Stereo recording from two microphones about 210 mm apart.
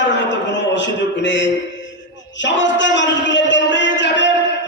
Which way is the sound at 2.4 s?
60° left (ahead or behind).